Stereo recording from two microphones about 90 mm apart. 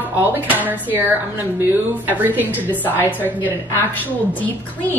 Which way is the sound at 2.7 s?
20° left (ahead or behind).